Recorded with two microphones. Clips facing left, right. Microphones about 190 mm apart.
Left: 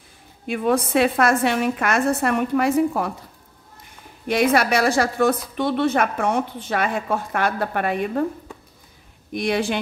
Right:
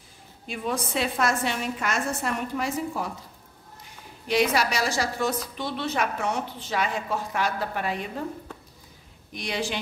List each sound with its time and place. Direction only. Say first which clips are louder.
0.5 s a woman's voice: left 9 dB; 60° left (ahead or behind)
4.3 s a woman's voice: left 5 dB; 55° left (ahead or behind)
9.3 s a woman's voice: left 8 dB; 55° left (ahead or behind)